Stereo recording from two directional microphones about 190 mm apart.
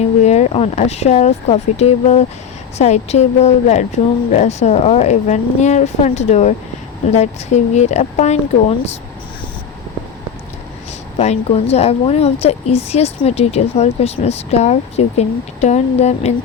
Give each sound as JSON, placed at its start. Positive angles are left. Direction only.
{"t": 0.2, "sound": "a woman's voice", "side_deg": 35}
{"t": 11.2, "sound": "a woman's voice", "side_deg": 35}